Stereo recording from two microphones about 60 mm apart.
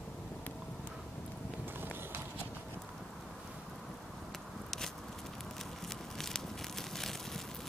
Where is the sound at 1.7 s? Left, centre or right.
Right.